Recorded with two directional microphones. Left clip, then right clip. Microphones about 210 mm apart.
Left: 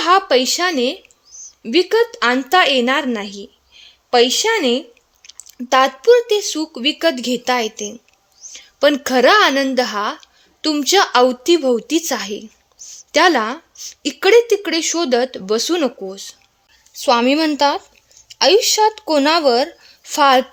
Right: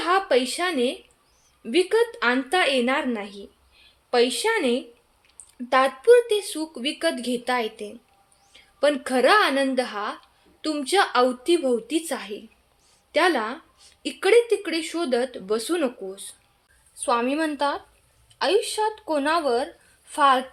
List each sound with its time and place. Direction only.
0.0 s a woman's voice: 40° left (ahead or behind)